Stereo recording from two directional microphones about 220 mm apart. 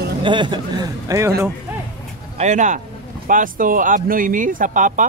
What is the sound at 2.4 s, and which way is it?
Speech, 35° right (ahead or behind).